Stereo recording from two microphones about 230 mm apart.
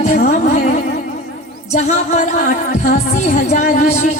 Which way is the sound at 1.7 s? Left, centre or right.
Left.